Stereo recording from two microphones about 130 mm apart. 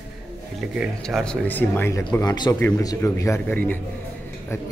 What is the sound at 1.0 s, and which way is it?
Speech, 5° left (ahead or behind).